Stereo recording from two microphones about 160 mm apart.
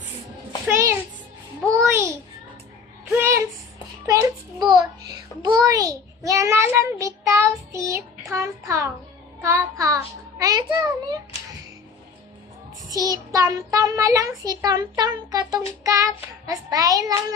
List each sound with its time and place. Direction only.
0.7 s music: 15° right (ahead or behind)
3.1 s a sound: 15° right (ahead or behind)
5.4 s child singing: 25° right (ahead or behind)
12.9 s child singing: 20° right (ahead or behind)